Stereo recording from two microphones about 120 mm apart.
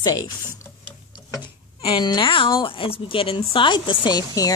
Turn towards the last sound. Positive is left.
turn(degrees=35)  # may be behind; listen again after turning